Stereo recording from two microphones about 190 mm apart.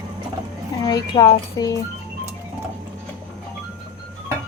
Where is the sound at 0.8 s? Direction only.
20° left (ahead or behind).